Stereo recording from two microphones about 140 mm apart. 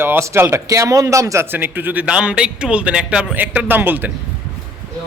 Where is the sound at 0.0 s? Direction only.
15° right (ahead or behind).